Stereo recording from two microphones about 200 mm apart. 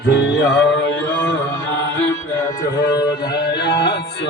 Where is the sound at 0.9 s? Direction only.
65° left (ahead or behind).